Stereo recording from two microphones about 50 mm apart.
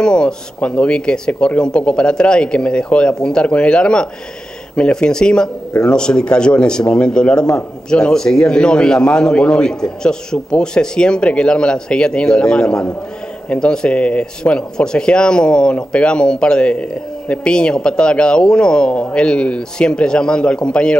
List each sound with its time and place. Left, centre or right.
0.0 s a man's voice: centre